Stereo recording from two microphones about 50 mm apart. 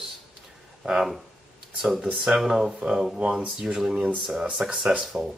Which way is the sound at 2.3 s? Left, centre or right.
Centre.